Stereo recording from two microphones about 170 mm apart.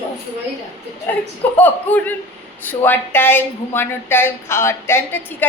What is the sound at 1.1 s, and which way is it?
A woman's voice, 10° left (ahead or behind).